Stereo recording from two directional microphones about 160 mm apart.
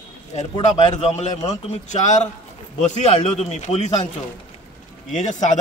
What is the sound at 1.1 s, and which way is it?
A man's voice, 45° left (ahead or behind).